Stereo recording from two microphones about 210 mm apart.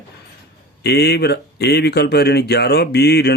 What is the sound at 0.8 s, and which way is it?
Speech, 50° left (ahead or behind).